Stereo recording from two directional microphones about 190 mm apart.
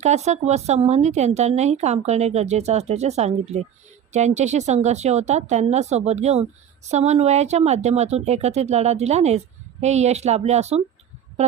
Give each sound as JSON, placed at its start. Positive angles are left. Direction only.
{"t": 0.0, "sound": "speech", "side_deg": -35}